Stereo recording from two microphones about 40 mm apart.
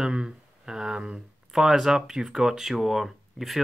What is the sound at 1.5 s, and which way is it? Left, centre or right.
Speech, centre.